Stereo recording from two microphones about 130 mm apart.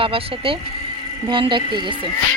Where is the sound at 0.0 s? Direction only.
45° right (ahead or behind).